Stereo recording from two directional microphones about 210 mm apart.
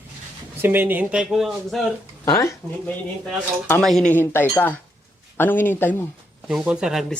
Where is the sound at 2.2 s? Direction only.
15° left (ahead or behind).